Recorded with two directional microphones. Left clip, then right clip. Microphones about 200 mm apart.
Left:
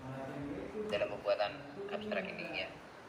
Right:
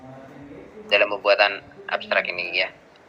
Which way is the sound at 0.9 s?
40° right (ahead or behind).